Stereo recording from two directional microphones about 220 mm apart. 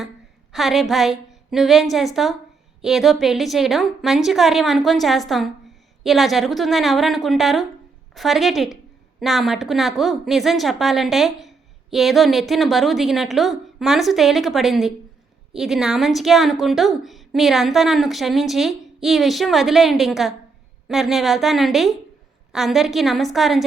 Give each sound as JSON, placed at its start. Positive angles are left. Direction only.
{"t": 0.5, "sound": "a woman's voice", "side_deg": 0}